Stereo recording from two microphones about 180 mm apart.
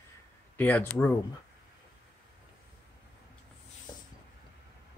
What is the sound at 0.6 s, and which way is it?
Speech, 10° left (ahead or behind).